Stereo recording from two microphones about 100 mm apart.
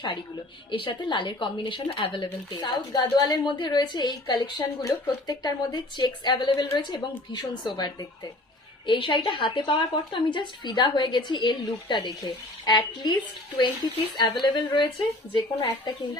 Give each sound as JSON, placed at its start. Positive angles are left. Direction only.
{"t": 0.7, "sound": "a woman's voice", "side_deg": 55}
{"t": 8.9, "sound": "a woman's voice", "side_deg": 55}